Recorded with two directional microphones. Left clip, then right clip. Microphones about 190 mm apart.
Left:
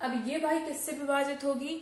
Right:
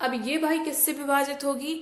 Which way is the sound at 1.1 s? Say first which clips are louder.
Right 4 dB; 45° right (ahead or behind).